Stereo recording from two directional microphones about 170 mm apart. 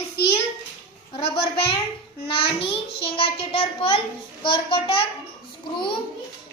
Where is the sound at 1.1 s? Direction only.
30° left (ahead or behind).